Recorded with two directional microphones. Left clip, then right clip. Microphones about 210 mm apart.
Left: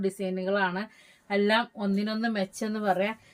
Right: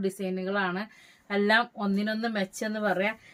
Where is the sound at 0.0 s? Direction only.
20° right (ahead or behind).